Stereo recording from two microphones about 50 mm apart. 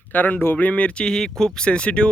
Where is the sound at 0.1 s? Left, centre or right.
Left.